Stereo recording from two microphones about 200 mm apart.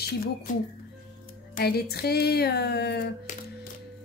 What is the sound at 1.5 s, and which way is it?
A woman's voice, 50° left (ahead or behind).